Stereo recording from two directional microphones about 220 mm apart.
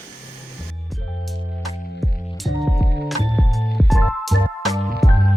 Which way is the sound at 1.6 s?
Centre (ahead or behind).